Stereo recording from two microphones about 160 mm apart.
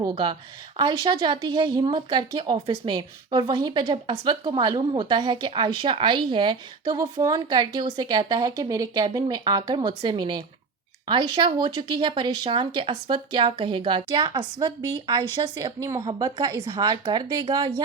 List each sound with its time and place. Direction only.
0.0 s a woman's voice: 30° right (ahead or behind)